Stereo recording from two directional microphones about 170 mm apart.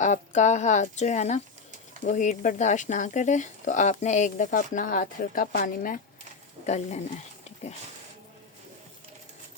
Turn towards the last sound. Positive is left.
turn(degrees=40)  # may be behind; listen again after turning